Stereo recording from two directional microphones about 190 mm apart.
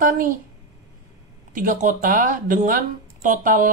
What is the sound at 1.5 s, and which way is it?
Speech, 45° right (ahead or behind).